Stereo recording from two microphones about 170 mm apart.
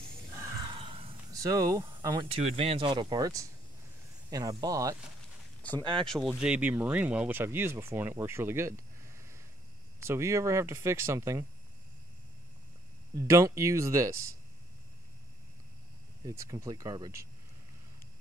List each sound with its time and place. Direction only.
0.7 s a sound: 30° right (ahead or behind)
1.3 s speech: 20° right (ahead or behind)
6.2 s speech: 5° right (ahead or behind)
13.1 s speech: 20° right (ahead or behind)
16.3 s speech: 20° right (ahead or behind)